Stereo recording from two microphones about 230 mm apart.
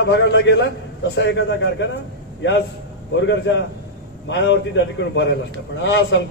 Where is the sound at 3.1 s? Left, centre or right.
Left.